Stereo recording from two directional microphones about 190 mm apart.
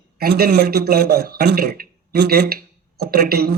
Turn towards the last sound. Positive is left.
turn(degrees=-55)  # may be behind; listen again after turning